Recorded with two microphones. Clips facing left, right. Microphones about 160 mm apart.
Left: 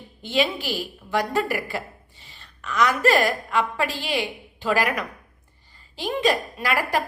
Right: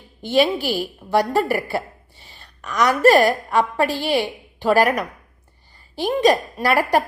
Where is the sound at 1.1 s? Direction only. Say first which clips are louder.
Right 5 dB; 35° right (ahead or behind).